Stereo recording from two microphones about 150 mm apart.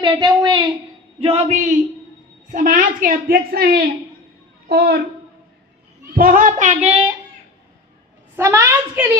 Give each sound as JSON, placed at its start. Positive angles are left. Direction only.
{"t": 0.0, "sound": "a woman's voice", "side_deg": -25}
{"t": 1.2, "sound": "speech", "side_deg": -45}
{"t": 2.5, "sound": "a woman's voice", "side_deg": -60}
{"t": 6.1, "sound": "speech", "side_deg": -65}
{"t": 8.4, "sound": "a woman's voice", "side_deg": -15}